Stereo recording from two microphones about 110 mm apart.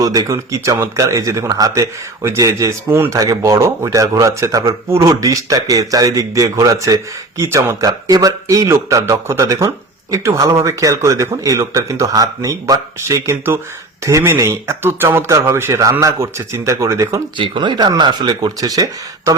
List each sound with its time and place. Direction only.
0.0 s speech: 35° right (ahead or behind)
17.3 s speech: 45° right (ahead or behind)